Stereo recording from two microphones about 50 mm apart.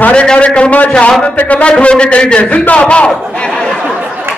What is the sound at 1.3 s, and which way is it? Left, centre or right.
Speech, left.